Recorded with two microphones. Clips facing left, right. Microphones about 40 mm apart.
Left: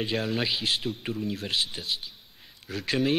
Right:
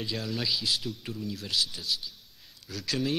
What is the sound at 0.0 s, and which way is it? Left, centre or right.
A man's voice, left.